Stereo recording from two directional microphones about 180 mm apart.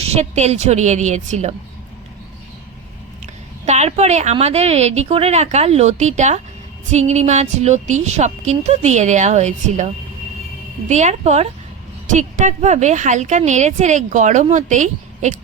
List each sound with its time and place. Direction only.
0.0 s a woman's voice: 35° right (ahead or behind)
3.7 s a woman's voice: 35° right (ahead or behind)